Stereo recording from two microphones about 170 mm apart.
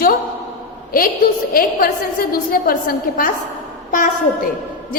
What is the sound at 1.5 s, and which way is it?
A woman's voice, 60° left (ahead or behind).